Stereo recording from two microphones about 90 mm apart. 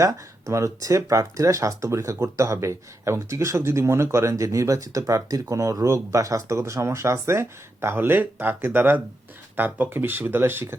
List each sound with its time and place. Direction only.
0.0 s speech: 35° right (ahead or behind)